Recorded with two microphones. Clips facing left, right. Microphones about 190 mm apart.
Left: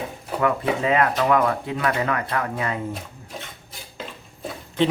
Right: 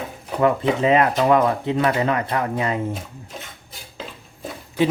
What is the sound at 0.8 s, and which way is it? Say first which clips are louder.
Speech: right 3 dB; 20° right (ahead or behind).